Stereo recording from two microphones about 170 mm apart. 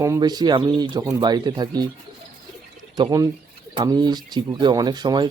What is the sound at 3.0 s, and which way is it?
Speech, 20° right (ahead or behind).